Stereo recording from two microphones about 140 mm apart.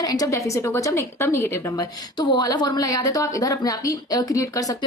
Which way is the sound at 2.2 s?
30° left (ahead or behind).